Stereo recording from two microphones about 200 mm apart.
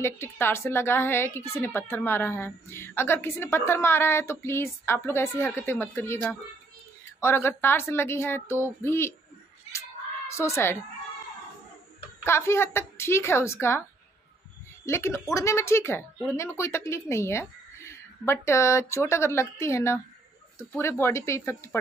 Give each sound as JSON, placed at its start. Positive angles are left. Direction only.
{"t": 0.0, "sound": "a woman's voice", "side_deg": 10}
{"t": 9.7, "sound": "cat", "side_deg": 15}
{"t": 12.3, "sound": "a woman's voice", "side_deg": 10}
{"t": 14.9, "sound": "a woman's voice", "side_deg": 15}